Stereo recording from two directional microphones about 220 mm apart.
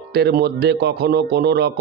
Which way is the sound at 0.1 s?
45° right (ahead or behind).